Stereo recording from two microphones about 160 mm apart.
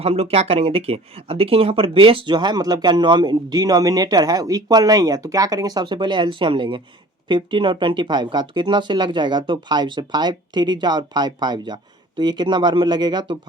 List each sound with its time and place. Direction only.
0.0 s speech: 40° right (ahead or behind)